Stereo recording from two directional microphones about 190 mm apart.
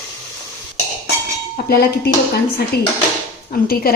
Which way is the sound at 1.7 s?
55° left (ahead or behind).